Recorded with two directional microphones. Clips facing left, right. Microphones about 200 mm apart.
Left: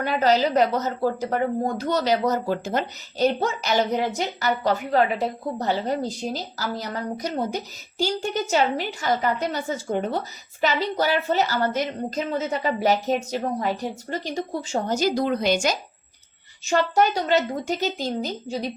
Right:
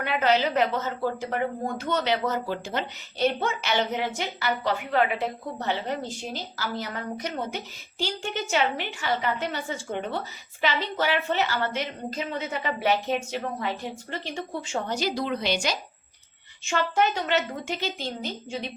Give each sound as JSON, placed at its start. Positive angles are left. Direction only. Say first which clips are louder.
{"t": 0.0, "sound": "a woman's voice", "louder": "left 3 dB", "side_deg": 40}